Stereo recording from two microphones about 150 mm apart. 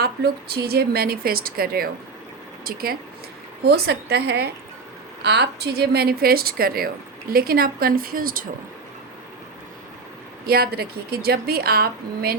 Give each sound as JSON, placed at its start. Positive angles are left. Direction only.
{"t": 0.0, "sound": "a woman's voice", "side_deg": -90}
{"t": 10.4, "sound": "a woman's voice", "side_deg": -90}